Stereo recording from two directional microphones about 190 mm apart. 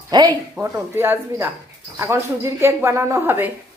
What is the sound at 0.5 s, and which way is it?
Speech, 15° right (ahead or behind).